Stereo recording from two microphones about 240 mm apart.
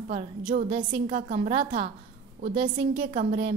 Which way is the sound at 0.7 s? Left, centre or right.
Right.